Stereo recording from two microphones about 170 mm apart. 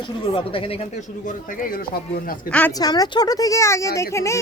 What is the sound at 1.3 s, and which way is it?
Speech, 55° left (ahead or behind).